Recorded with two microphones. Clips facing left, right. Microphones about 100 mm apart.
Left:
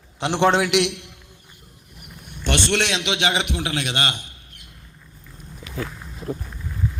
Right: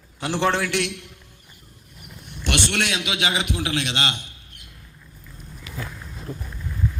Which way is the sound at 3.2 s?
55° left (ahead or behind).